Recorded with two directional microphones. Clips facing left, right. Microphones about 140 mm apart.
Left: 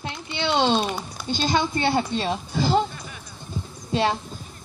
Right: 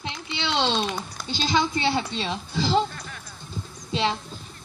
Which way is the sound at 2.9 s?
10° left (ahead or behind).